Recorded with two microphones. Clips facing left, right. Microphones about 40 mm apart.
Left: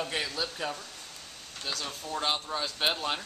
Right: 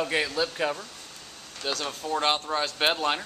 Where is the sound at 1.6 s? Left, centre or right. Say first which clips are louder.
Right 5 dB; right.